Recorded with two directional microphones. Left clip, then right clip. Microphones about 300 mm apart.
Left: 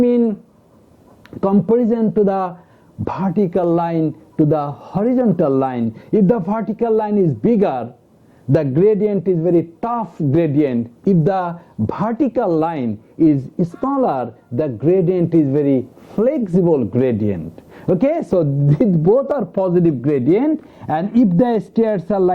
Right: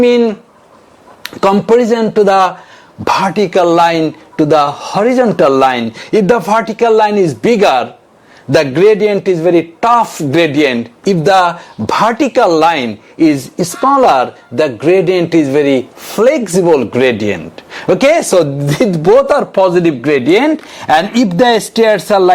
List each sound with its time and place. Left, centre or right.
0.0 s a man's voice: centre
19.0 s speech: centre
19.3 s a man's voice: centre